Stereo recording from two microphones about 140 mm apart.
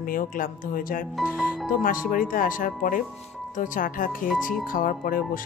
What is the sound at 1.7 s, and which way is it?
Speech, 85° left.